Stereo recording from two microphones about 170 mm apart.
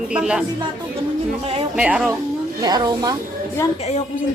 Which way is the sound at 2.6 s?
25° right (ahead or behind).